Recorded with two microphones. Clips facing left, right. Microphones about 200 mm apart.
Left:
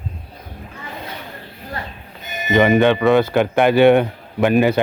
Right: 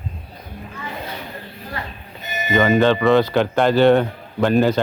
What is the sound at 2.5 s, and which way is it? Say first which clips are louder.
Speech: left 2 dB; 15° left (ahead or behind).